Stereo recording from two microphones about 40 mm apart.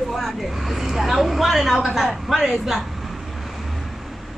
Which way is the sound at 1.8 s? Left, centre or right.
Centre.